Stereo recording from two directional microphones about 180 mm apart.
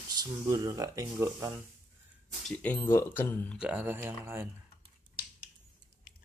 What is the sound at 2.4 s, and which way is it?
Speech, 10° left (ahead or behind).